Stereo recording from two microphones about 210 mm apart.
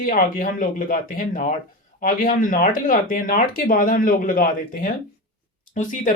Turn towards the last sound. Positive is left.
turn(degrees=35)  # may be behind; listen again after turning